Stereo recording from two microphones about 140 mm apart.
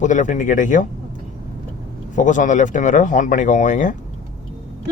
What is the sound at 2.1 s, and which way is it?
Speech, 65° left (ahead or behind).